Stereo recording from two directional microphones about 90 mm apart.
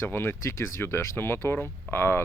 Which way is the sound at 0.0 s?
25° left (ahead or behind).